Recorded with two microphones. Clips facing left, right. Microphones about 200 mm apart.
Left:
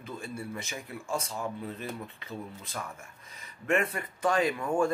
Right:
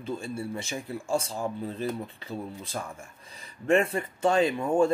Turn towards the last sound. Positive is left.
turn(degrees=-25)  # may be behind; listen again after turning